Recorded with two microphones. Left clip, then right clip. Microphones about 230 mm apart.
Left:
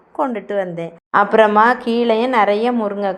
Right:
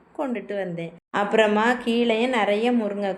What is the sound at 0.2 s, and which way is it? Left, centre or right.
A woman's voice, centre.